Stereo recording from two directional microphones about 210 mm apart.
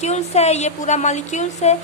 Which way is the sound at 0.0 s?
30° left (ahead or behind).